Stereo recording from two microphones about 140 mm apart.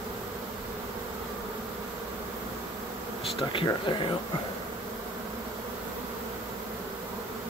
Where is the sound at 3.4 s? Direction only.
40° left (ahead or behind).